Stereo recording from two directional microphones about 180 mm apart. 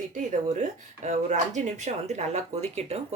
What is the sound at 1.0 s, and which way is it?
Speech, 40° right (ahead or behind).